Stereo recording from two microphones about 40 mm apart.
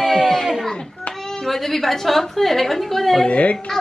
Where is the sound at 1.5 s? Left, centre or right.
Centre.